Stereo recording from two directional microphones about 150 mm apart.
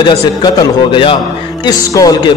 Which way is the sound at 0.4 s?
25° left (ahead or behind).